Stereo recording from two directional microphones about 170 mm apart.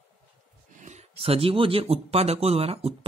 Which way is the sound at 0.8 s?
40° right (ahead or behind).